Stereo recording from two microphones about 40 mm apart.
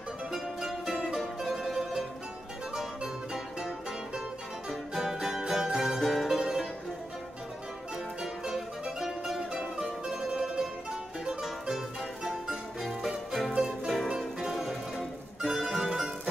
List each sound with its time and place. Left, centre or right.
0.3 s music: centre
5.0 s music: centre
5.9 s music: centre
6.2 s music: centre
8.2 s music: centre
14.5 s music: centre